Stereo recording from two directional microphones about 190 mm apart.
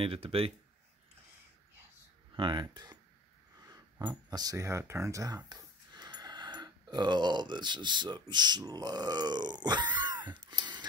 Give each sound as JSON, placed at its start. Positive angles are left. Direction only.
{"t": 0.0, "sound": "speech", "side_deg": -30}
{"t": 2.3, "sound": "speech", "side_deg": -25}
{"t": 9.9, "sound": "wheeze", "side_deg": -20}